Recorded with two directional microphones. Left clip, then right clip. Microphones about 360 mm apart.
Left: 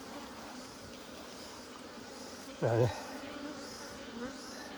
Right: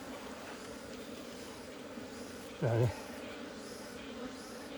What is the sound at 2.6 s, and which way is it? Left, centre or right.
Insect, left.